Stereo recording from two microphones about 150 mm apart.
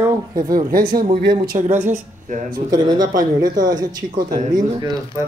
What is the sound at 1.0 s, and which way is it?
Speech, 35° right (ahead or behind).